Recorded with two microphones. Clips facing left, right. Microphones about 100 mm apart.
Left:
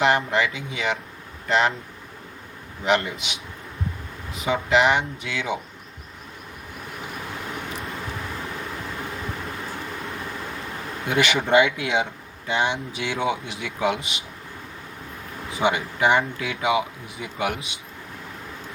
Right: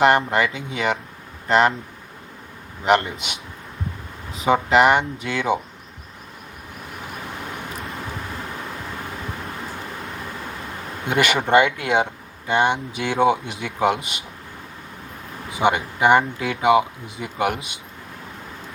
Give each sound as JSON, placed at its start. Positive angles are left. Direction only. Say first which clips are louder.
{"t": 0.3, "sound": "speech", "louder": "right 2 dB", "side_deg": -45}
{"t": 2.8, "sound": "speech", "louder": "right 4 dB", "side_deg": -50}
{"t": 4.4, "sound": "speech", "louder": "right 4 dB", "side_deg": -50}
{"t": 11.2, "sound": "speech", "louder": "right 2 dB", "side_deg": -50}
{"t": 15.6, "sound": "speech", "louder": "right 3 dB", "side_deg": -50}